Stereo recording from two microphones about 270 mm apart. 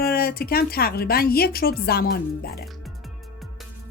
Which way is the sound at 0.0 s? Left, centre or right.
Left.